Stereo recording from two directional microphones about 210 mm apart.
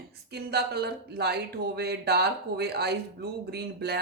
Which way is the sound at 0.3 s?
50° right (ahead or behind).